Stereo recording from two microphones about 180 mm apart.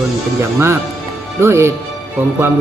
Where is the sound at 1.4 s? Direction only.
15° right (ahead or behind).